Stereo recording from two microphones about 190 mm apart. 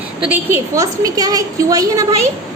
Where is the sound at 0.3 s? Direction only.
15° right (ahead or behind).